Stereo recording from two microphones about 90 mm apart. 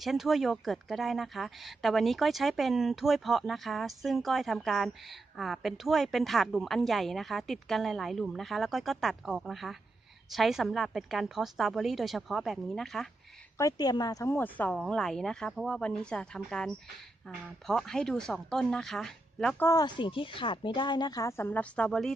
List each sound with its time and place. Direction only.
0.0 s speech: centre (ahead or behind)
13.6 s speech: 45° left (ahead or behind)
14.3 s speech: 20° left (ahead or behind)
14.7 s a woman's voice: 5° left (ahead or behind)
20.0 s speech: 70° left (ahead or behind)
21.2 s speech: 30° left (ahead or behind)
21.5 s a woman's voice: 15° left (ahead or behind)